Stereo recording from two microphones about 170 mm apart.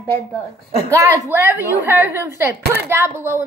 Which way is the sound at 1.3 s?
10° right (ahead or behind).